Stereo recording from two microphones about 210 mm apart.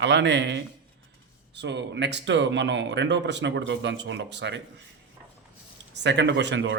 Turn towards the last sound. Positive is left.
turn(degrees=-60)  # may be behind; listen again after turning